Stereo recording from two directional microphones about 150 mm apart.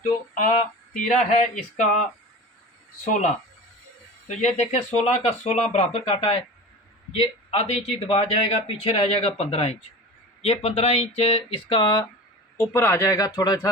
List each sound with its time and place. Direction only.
0.0 s speech: 60° left (ahead or behind)
3.1 s speech: 55° left (ahead or behind); by 12.0 s 25° left (ahead or behind)
12.5 s speech: 15° left (ahead or behind)